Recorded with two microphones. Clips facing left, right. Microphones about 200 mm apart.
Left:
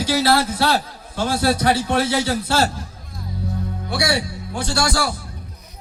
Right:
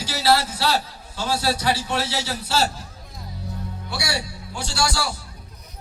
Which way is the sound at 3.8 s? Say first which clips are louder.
Left 7 dB; 55° left (ahead or behind).